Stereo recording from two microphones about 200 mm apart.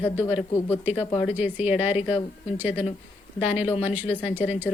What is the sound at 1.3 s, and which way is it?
Speech, 10° right (ahead or behind).